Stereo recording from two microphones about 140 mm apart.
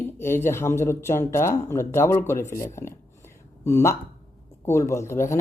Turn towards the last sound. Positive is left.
turn(degrees=20)  # may be behind; listen again after turning